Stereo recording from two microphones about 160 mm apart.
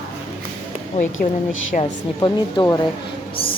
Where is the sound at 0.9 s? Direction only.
50° left (ahead or behind).